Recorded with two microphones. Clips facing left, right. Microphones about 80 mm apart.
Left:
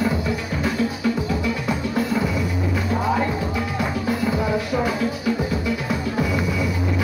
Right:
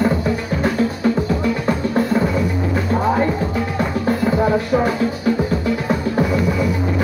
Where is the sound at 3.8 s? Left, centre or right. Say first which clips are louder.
Right 5 dB; right.